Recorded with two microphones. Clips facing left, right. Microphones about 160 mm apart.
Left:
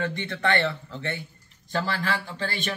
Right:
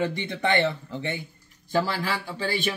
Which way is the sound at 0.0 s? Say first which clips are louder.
Right 1 dB; 15° right (ahead or behind).